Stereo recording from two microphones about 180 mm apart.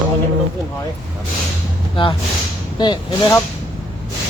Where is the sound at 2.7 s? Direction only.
25° left (ahead or behind).